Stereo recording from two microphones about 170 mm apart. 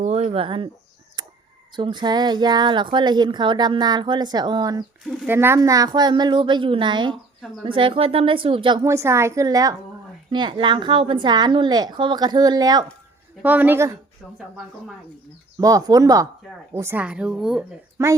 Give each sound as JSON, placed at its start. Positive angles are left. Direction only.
{"t": 0.0, "sound": "speech", "side_deg": -40}
{"t": 1.2, "sound": "a sound", "side_deg": -25}
{"t": 1.7, "sound": "a woman's voice", "side_deg": -25}
{"t": 13.4, "sound": "a woman's voice", "side_deg": -10}
{"t": 15.5, "sound": "a woman's voice", "side_deg": -20}
{"t": 17.9, "sound": "speech", "side_deg": -15}